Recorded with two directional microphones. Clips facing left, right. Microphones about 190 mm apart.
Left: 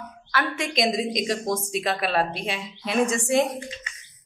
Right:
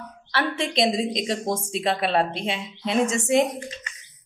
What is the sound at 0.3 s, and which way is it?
A woman's voice, 30° right (ahead or behind).